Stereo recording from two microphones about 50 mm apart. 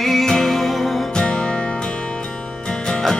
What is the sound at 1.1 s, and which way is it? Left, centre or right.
Music, centre.